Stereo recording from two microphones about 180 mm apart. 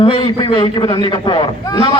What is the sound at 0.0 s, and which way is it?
A man's voice, 25° left (ahead or behind).